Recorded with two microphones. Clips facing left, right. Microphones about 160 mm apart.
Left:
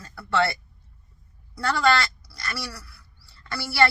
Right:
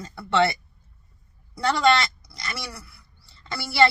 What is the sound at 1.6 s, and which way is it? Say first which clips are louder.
Speech: right 2 dB; 20° right (ahead or behind).